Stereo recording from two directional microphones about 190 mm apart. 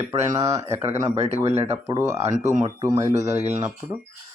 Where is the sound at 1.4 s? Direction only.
35° right (ahead or behind).